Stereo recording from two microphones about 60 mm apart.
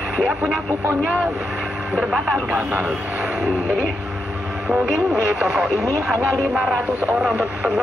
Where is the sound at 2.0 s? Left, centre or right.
Centre.